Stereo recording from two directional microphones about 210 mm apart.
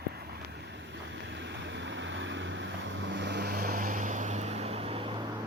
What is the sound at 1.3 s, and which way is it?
Vehicle, 60° right (ahead or behind).